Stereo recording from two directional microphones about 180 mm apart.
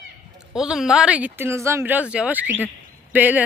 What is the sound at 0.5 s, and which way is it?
Speech, 5° right (ahead or behind).